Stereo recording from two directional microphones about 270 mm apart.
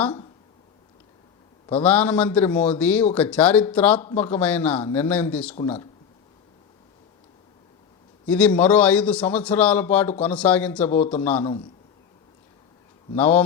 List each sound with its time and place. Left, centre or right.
0.0 s speech: centre
1.7 s a man's voice: centre
8.3 s a man's voice: centre
13.1 s a man's voice: centre